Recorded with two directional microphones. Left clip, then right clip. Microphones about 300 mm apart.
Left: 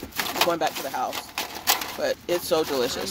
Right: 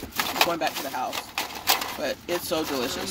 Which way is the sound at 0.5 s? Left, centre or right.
Centre.